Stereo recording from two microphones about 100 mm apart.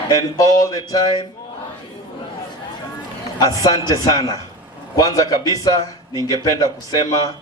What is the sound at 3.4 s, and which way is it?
A man's voice, 40° left (ahead or behind).